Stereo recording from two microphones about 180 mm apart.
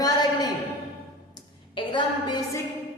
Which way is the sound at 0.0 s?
20° left (ahead or behind).